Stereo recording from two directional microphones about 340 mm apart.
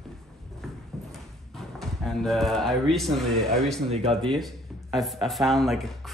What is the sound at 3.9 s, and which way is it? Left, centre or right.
Speech, centre.